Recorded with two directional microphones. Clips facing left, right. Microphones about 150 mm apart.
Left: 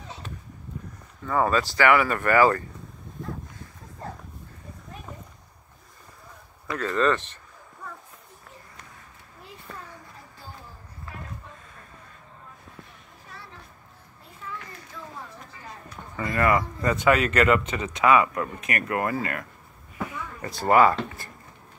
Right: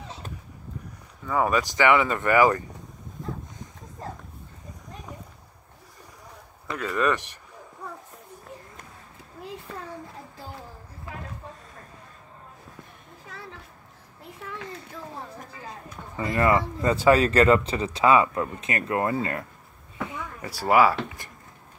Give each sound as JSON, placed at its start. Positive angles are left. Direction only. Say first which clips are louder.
{"t": 1.2, "sound": "speech", "louder": "even", "side_deg": -10}
{"t": 6.7, "sound": "speech", "louder": "left 2 dB", "side_deg": -10}
{"t": 14.4, "sound": "children playing", "louder": "even", "side_deg": -65}
{"t": 16.2, "sound": "speech", "louder": "right 1 dB", "side_deg": -20}
{"t": 20.4, "sound": "speech", "louder": "left 1 dB", "side_deg": -10}